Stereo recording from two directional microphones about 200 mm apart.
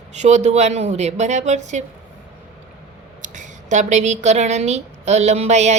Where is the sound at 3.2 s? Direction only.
40° right (ahead or behind).